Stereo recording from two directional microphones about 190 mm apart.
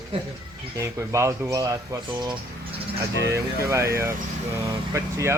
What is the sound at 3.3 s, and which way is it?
Speech, 15° right (ahead or behind).